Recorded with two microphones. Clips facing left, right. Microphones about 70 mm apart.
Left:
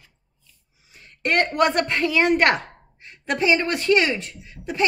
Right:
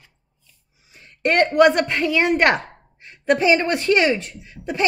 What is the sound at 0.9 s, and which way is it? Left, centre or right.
A woman's voice, centre.